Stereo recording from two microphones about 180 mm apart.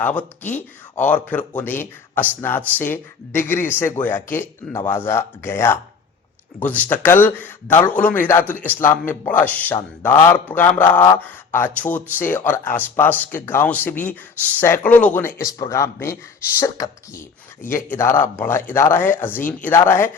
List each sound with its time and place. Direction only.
0.0 s a man's voice: 10° left (ahead or behind)